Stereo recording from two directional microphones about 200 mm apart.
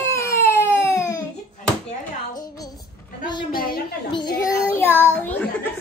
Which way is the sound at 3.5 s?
50° left (ahead or behind).